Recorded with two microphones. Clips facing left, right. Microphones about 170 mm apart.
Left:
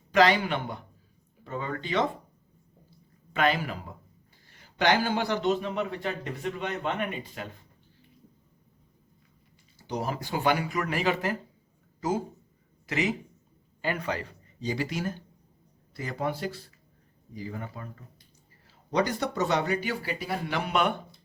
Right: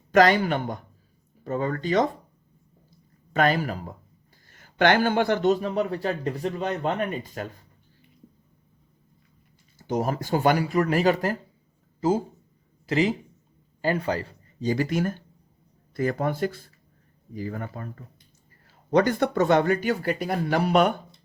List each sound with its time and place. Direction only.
0.1 s a man's voice: 45° right (ahead or behind)
3.3 s a man's voice: 45° right (ahead or behind)
9.7 s speech: 50° right (ahead or behind)
11.9 s a man's voice: 30° right (ahead or behind)
14.7 s speech: 50° right (ahead or behind)